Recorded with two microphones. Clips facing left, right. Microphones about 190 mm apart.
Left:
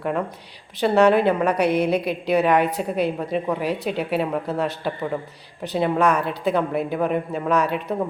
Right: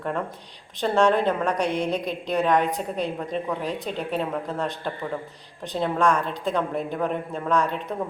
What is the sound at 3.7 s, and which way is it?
Speech, 70° left (ahead or behind).